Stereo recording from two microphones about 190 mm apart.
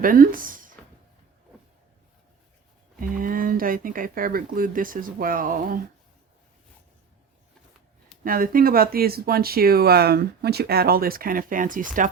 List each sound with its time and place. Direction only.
0.0 s speech: 45° right (ahead or behind)
3.0 s speech: 45° right (ahead or behind)
8.2 s speech: 50° right (ahead or behind)